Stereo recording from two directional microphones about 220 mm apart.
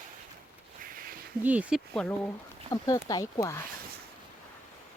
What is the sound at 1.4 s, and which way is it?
Speech, 5° right (ahead or behind).